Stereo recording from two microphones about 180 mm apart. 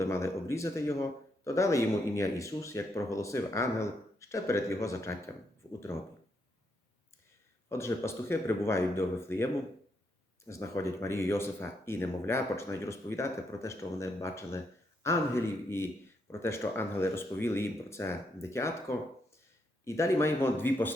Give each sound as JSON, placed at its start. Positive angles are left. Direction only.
{"t": 0.0, "sound": "speech", "side_deg": 15}
{"t": 7.7, "sound": "speech", "side_deg": 15}